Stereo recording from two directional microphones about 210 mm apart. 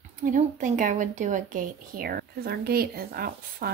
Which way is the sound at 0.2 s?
35° right (ahead or behind).